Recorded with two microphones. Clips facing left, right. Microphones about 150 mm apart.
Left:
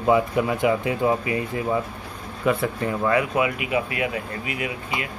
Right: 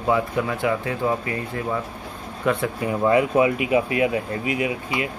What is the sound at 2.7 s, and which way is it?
Speech, 15° right (ahead or behind).